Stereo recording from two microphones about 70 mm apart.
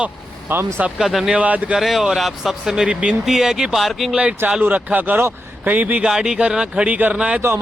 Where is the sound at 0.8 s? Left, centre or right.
Centre.